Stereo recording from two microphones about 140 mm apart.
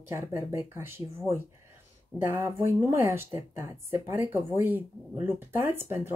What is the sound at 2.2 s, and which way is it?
Speech, 15° right (ahead or behind).